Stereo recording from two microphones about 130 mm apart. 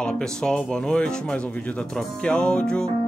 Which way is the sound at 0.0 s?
5° left (ahead or behind).